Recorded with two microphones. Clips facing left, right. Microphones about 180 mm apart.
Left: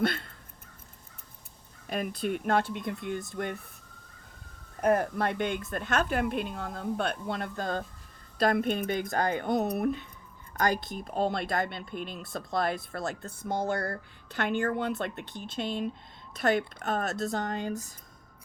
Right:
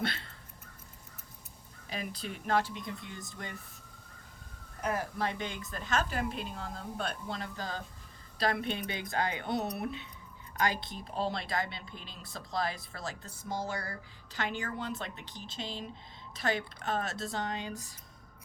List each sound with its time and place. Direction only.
0.0 s a sound: 50° left (ahead or behind)
1.9 s speech: 55° left (ahead or behind)
4.8 s speech: 55° left (ahead or behind)